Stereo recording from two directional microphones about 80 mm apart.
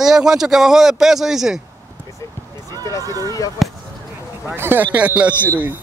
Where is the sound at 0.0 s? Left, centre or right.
Centre.